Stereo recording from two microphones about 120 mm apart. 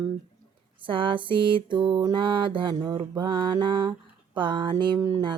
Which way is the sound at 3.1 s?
40° right (ahead or behind).